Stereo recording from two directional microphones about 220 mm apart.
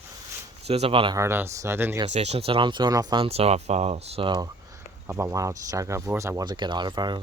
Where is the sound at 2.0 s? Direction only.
30° right (ahead or behind).